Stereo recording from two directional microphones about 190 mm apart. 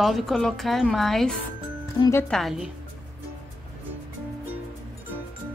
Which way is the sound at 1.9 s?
15° left (ahead or behind).